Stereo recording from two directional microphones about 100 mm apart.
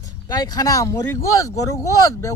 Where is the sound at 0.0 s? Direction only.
40° left (ahead or behind).